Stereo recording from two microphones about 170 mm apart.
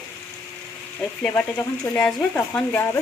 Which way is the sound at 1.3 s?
10° left (ahead or behind).